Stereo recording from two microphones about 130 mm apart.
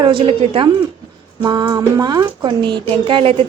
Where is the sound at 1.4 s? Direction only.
30° right (ahead or behind).